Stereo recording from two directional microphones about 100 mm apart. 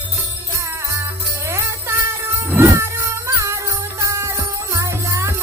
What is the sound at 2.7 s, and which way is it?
Music, 30° right (ahead or behind).